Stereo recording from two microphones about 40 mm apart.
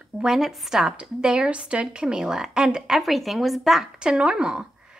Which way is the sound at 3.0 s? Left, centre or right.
Centre.